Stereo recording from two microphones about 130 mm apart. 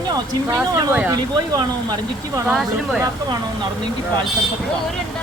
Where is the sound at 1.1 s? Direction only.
30° right (ahead or behind).